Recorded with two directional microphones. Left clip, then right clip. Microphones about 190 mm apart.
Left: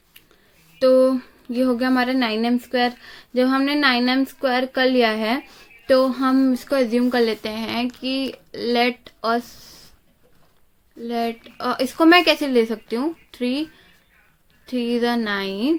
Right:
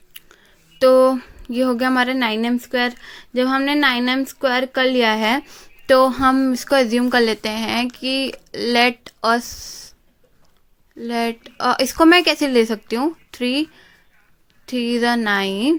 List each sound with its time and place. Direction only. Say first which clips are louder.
0.8 s speech: right 3 dB; 40° right (ahead or behind)
11.0 s speech: right 2 dB; 40° right (ahead or behind)